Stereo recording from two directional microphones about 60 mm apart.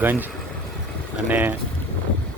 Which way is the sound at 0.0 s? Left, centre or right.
Right.